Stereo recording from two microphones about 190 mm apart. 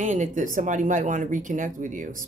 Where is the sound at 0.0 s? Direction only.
40° right (ahead or behind).